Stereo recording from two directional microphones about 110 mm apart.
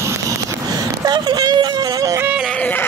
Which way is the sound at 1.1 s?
40° right (ahead or behind).